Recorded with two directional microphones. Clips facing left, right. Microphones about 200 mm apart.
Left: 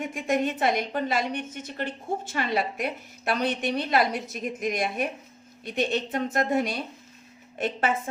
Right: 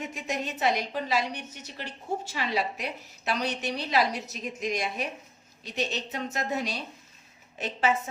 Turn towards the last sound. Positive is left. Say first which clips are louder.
# left 2 dB
turn(degrees=55)  # may be behind; listen again after turning